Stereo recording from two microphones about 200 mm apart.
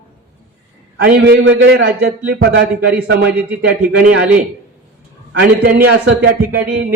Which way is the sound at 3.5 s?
5° right (ahead or behind).